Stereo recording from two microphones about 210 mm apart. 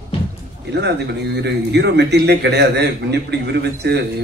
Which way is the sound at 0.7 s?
55° right (ahead or behind).